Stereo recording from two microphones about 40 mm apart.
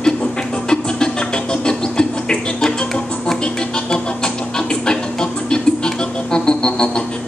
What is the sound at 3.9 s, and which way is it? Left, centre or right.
Music, centre.